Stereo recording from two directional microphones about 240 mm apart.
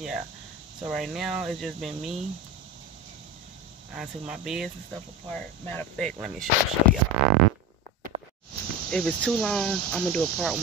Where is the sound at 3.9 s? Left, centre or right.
Centre.